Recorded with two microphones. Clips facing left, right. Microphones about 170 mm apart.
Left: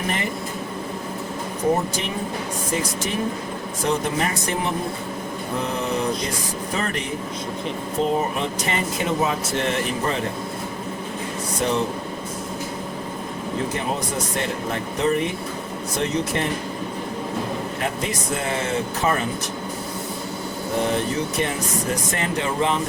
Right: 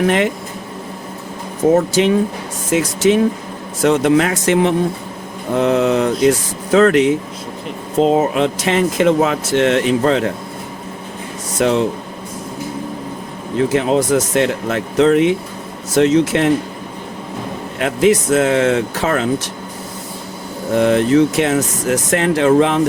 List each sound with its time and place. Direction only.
1.7 s speech: 90° right
11.5 s speech: 90° right
13.7 s speech: 90° right
17.7 s speech: 90° right
20.7 s speech: 75° right (ahead or behind)